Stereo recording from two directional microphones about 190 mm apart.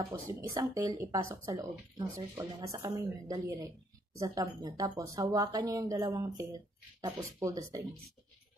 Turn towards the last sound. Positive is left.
turn(degrees=-15)  # may be behind; listen again after turning